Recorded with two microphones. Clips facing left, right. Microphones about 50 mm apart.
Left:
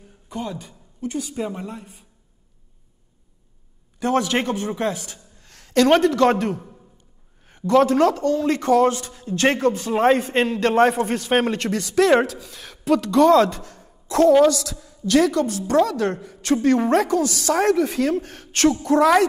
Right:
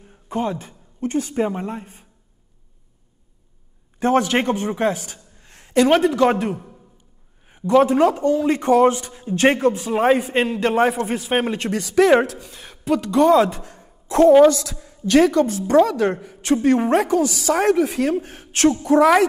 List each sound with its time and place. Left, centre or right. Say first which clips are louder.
0.0 s a woman's voice: right 6 dB; right
4.0 s a man's voice: right 3 dB; right
5.9 s a man's voice: left 1 dB; centre
14.5 s a woman's voice: right 2 dB; right
16.2 s a sound: even; right
16.6 s a woman's voice: even; centre